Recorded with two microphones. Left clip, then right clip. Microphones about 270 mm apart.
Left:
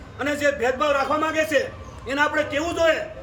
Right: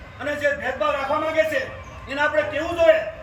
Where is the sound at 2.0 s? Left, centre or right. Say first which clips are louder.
Even; centre.